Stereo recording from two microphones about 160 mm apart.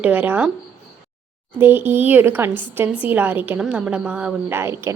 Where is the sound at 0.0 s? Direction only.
10° right (ahead or behind).